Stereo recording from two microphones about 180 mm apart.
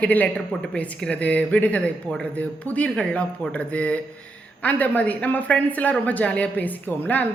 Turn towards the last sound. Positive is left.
turn(degrees=10)  # may be behind; listen again after turning